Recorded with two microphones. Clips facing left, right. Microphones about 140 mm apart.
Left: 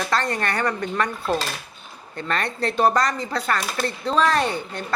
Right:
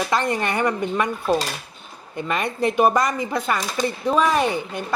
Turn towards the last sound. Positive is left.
turn(degrees=-15)  # may be behind; listen again after turning